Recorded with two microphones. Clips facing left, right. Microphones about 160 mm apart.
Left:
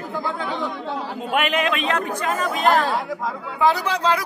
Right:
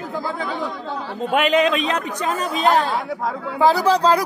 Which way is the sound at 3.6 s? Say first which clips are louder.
Right 4 dB; 35° right (ahead or behind).